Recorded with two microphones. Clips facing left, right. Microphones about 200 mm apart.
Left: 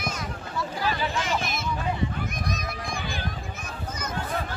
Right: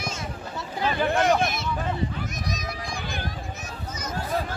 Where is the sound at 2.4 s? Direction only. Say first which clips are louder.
Even; 55° left (ahead or behind).